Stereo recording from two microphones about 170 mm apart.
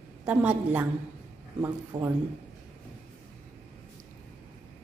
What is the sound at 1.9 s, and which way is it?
Speech, 25° right (ahead or behind).